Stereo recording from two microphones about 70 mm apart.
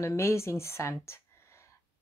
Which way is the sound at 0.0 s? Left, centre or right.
Left.